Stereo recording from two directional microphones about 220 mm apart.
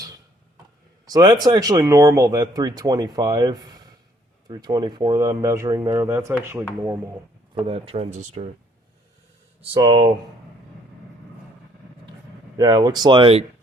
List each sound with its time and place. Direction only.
1.0 s speech: 15° right (ahead or behind)
7.7 s speech: 25° right (ahead or behind)
9.6 s speech: 20° right (ahead or behind)
12.5 s speech: 20° right (ahead or behind)